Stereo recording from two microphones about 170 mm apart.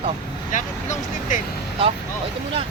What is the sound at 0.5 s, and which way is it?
Speech, 50° left (ahead or behind).